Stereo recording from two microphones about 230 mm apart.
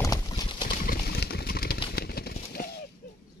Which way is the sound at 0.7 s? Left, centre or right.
Left.